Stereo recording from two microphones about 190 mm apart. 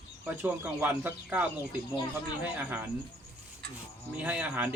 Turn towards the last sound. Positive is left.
turn(degrees=-5)  # may be behind; listen again after turning